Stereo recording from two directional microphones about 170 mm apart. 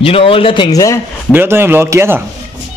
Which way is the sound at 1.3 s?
10° right (ahead or behind).